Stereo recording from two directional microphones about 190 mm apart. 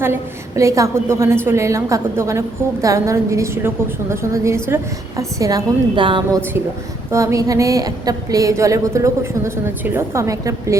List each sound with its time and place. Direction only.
0.0 s a woman's voice: 15° right (ahead or behind)
7.1 s a woman's voice: 15° right (ahead or behind)